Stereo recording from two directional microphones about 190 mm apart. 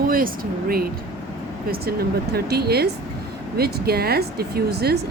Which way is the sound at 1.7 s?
55° right (ahead or behind).